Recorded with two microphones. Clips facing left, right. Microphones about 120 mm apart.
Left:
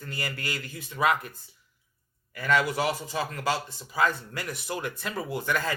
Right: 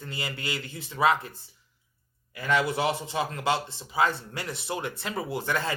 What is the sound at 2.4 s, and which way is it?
Speech, 25° right (ahead or behind).